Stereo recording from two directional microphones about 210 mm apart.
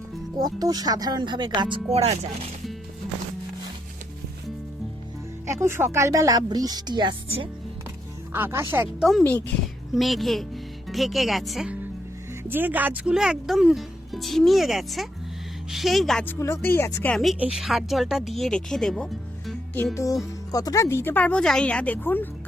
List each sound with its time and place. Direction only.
0.3 s speech: 20° right (ahead or behind)
5.5 s speech: 10° right (ahead or behind)
8.3 s speech: 10° right (ahead or behind)
9.0 s speech: 5° left (ahead or behind)